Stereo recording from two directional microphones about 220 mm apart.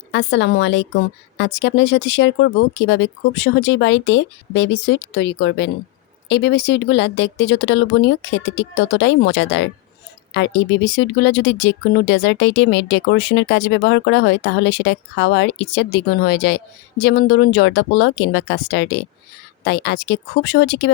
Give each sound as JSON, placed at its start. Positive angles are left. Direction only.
{"t": 0.1, "sound": "speech", "side_deg": 55}